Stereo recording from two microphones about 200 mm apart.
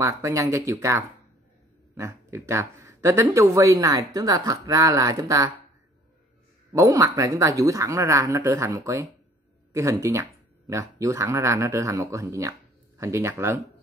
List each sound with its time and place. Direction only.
0.0 s speech: 15° right (ahead or behind)
6.7 s speech: 15° right (ahead or behind)